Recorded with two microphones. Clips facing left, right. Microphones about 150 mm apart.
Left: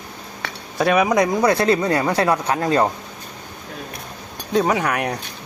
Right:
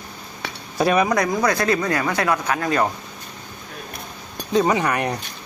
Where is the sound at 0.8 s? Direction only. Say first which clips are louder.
Left 1 dB; centre (ahead or behind).